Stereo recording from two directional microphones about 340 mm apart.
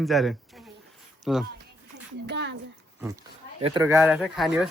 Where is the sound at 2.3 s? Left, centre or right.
Right.